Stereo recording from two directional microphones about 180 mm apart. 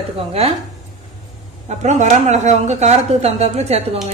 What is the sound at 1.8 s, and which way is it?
A woman's voice, 40° right (ahead or behind).